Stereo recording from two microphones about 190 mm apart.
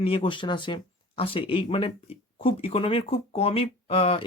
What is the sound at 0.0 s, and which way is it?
Speech, 30° left (ahead or behind).